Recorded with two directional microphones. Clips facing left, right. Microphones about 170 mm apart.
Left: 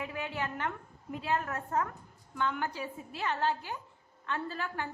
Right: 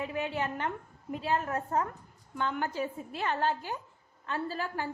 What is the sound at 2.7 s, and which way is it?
Speech, 45° right (ahead or behind).